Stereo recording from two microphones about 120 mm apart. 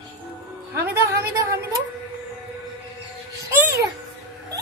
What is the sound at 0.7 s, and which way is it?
A woman's voice, 25° right (ahead or behind).